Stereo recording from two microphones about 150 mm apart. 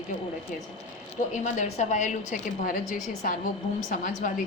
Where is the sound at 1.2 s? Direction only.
50° left (ahead or behind).